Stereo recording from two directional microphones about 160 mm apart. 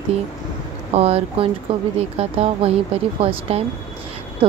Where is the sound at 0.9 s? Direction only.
40° right (ahead or behind).